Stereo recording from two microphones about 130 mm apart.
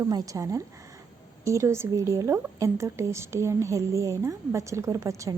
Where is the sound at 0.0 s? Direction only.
25° right (ahead or behind).